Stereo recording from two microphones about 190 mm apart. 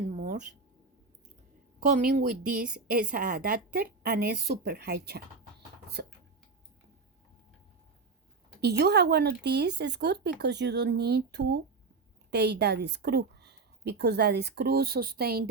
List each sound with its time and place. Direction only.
0.0 s a sound: 35° right (ahead or behind)
1.9 s a woman's voice: 45° right (ahead or behind)
8.6 s speech: 60° right (ahead or behind)